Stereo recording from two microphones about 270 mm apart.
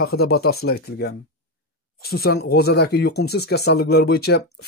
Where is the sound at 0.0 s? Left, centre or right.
Left.